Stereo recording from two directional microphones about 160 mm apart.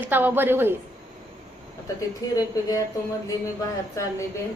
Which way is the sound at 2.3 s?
20° left (ahead or behind).